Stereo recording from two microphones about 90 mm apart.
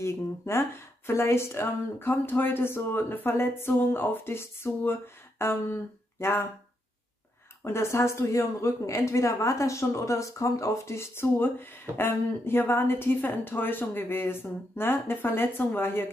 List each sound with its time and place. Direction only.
0.0 s a woman's voice: 30° left (ahead or behind)
7.6 s a woman's voice: 30° left (ahead or behind)